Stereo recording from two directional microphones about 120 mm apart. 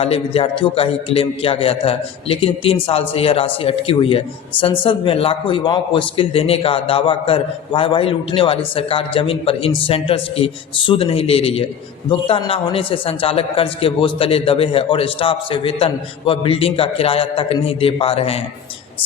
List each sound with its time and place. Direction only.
0.0 s a man's voice: 55° left (ahead or behind)